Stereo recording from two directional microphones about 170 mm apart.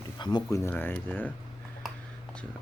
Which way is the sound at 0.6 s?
10° left (ahead or behind).